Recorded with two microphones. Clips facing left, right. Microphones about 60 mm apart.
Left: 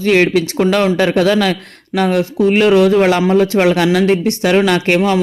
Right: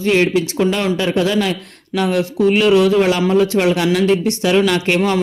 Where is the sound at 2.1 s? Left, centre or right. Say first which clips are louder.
Left 1 dB; left.